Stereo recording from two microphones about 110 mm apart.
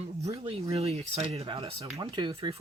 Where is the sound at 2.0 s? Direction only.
45° right (ahead or behind).